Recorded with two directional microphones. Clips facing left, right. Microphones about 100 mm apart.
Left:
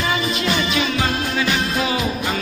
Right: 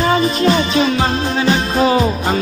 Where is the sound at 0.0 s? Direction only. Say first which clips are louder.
Right 8 dB; 40° right (ahead or behind).